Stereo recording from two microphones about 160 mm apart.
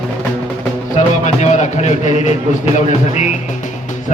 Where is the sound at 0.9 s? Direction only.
50° left (ahead or behind).